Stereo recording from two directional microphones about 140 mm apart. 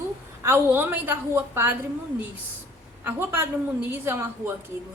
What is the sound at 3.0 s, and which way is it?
A woman's voice, 15° right (ahead or behind).